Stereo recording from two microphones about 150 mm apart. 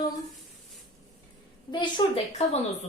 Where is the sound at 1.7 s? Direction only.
30° left (ahead or behind).